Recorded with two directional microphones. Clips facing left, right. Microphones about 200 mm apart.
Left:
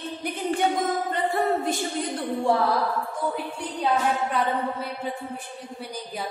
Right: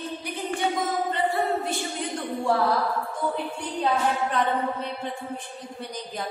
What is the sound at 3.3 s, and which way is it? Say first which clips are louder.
A woman's voice: right 1 dB; 10° left (ahead or behind).